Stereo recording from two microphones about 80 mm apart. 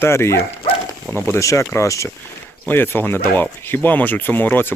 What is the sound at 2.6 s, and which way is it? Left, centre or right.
Speech, left.